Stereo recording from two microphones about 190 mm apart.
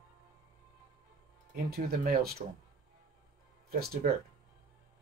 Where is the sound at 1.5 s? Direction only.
55° right (ahead or behind).